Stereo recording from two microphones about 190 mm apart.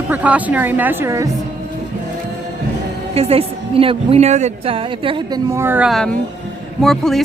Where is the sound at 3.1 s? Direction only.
30° right (ahead or behind).